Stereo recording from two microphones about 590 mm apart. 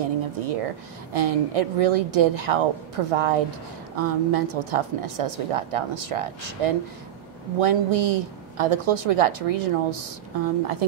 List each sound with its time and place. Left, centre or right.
0.0 s a woman's voice: right